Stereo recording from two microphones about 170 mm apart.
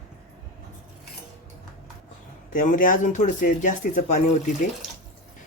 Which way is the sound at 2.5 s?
50° left (ahead or behind).